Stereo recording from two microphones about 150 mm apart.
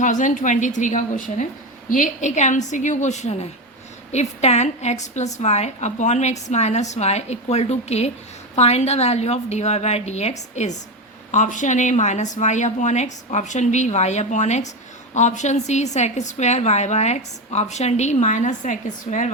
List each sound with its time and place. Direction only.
0.0 s a woman's voice: 55° left (ahead or behind)